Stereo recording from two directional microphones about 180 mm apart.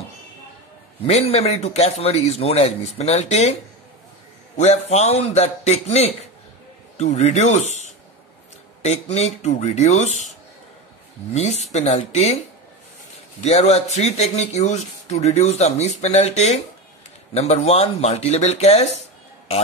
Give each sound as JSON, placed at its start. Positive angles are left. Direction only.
{"t": 1.0, "sound": "speech", "side_deg": 35}
{"t": 4.6, "sound": "speech", "side_deg": 35}
{"t": 11.3, "sound": "speech", "side_deg": 35}
{"t": 13.4, "sound": "speech", "side_deg": 35}
{"t": 18.9, "sound": "music", "side_deg": 40}